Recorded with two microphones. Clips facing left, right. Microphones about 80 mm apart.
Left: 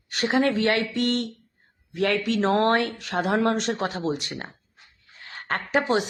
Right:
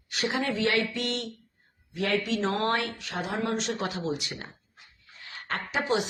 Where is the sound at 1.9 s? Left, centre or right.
Left.